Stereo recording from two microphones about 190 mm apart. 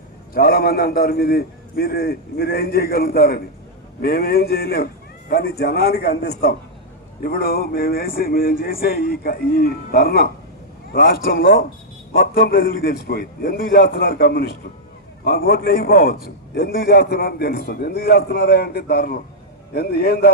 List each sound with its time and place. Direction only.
0.3 s a man's voice: 50° left (ahead or behind)